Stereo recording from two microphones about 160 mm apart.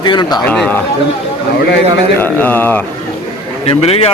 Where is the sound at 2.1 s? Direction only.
10° left (ahead or behind).